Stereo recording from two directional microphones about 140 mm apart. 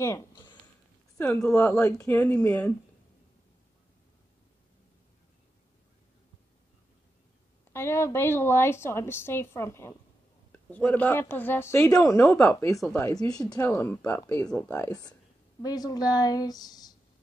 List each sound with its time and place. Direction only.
0.0 s a woman's voice: 20° left (ahead or behind)
7.7 s a woman's voice: 20° left (ahead or behind)
15.6 s a woman's voice: 30° left (ahead or behind)